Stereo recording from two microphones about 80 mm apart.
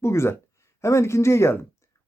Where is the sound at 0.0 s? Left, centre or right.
Left.